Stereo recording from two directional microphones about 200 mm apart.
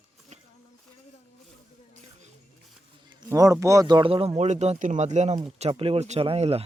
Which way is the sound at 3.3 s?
15° right (ahead or behind).